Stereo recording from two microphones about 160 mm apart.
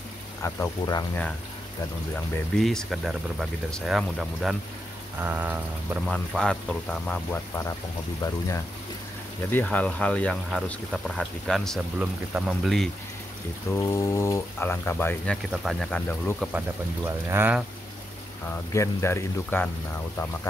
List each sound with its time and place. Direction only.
0.4 s speech: 20° left (ahead or behind)
2.5 s speech: 5° left (ahead or behind)
6.0 s speech: 5° left (ahead or behind)
13.7 s speech: 20° left (ahead or behind)
15.5 s speech: centre (ahead or behind)
15.9 s speech: 10° left (ahead or behind)
17.0 s speech: 15° right (ahead or behind)
18.5 s speech: 15° left (ahead or behind)